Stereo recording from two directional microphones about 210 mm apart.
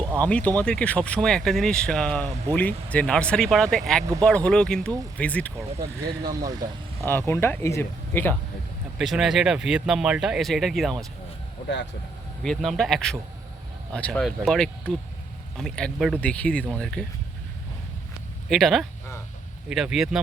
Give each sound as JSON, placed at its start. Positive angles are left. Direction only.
{"t": 0.2, "sound": "speech", "side_deg": 5}
{"t": 6.4, "sound": "speech", "side_deg": -20}
{"t": 7.0, "sound": "speech", "side_deg": 10}
{"t": 9.0, "sound": "speech", "side_deg": 0}
{"t": 12.4, "sound": "speech", "side_deg": 0}
{"t": 18.4, "sound": "speech", "side_deg": 0}